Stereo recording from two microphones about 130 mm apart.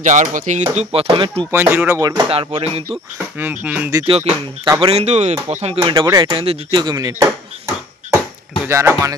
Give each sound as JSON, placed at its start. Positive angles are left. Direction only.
{"t": 0.0, "sound": "speech", "side_deg": -75}
{"t": 0.9, "sound": "speech", "side_deg": -45}
{"t": 1.5, "sound": "speech", "side_deg": -20}
{"t": 2.2, "sound": "speech", "side_deg": -50}
{"t": 2.9, "sound": "speech", "side_deg": -15}
{"t": 4.0, "sound": "speech", "side_deg": -45}
{"t": 6.0, "sound": "speech", "side_deg": -35}
{"t": 6.8, "sound": "speech", "side_deg": -30}
{"t": 8.6, "sound": "speech", "side_deg": -20}